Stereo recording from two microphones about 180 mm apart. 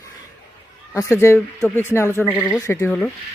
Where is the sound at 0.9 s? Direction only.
15° left (ahead or behind).